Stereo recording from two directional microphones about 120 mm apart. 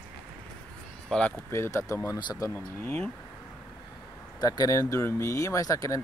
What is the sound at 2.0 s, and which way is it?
Speech, 35° left (ahead or behind).